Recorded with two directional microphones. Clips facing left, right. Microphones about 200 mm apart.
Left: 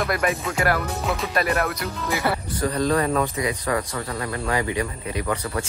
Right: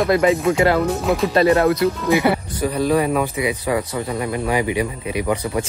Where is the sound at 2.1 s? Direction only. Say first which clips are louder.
Right 3 dB; 15° right (ahead or behind).